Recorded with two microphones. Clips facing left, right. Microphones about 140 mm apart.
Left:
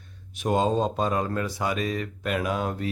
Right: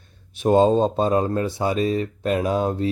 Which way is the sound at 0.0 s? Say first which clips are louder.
Right 7 dB; 30° right (ahead or behind).